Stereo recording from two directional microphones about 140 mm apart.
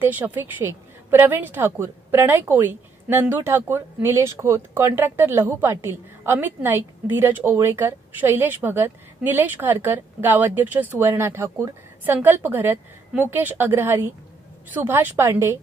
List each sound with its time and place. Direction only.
0.0 s a woman's voice: 15° right (ahead or behind)